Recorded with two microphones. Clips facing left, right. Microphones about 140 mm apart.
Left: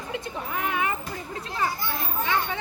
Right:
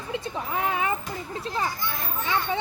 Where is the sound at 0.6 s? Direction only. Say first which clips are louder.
Right 1 dB; 30° right (ahead or behind).